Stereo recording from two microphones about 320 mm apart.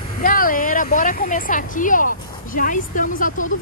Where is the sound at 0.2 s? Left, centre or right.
Left.